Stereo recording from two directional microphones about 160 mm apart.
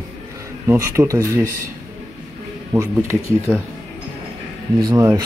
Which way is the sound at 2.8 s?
15° right (ahead or behind).